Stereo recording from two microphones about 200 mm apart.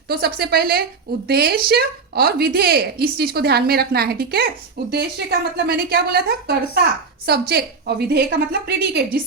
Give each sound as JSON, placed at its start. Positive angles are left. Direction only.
{"t": 0.1, "sound": "a woman's voice", "side_deg": -50}